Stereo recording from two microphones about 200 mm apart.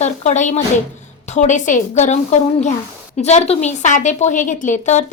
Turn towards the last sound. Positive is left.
turn(degrees=35)  # may be behind; listen again after turning